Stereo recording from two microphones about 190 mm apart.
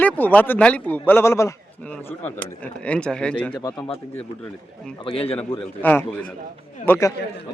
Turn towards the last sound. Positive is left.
turn(degrees=15)  # may be behind; listen again after turning